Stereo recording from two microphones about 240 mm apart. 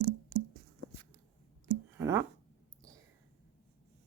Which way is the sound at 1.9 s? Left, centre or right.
Centre.